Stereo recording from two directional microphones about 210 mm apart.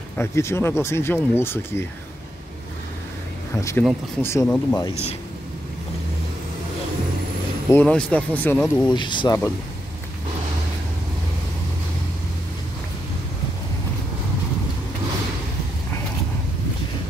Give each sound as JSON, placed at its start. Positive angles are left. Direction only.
{"t": 0.2, "sound": "speech", "side_deg": 10}
{"t": 3.8, "sound": "speech", "side_deg": 5}
{"t": 7.7, "sound": "speech", "side_deg": 5}
{"t": 8.8, "sound": "speech", "side_deg": 20}